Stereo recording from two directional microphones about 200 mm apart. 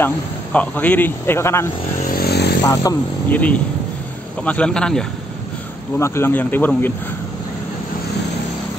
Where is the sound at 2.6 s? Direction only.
15° left (ahead or behind).